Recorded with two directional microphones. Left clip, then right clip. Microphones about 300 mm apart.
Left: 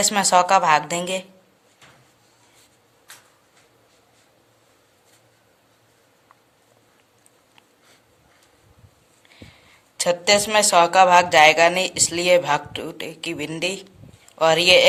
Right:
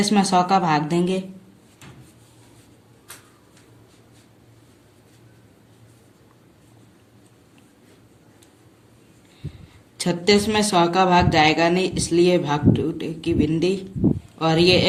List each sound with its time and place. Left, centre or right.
0.0 s a woman's voice: left
10.0 s a woman's voice: left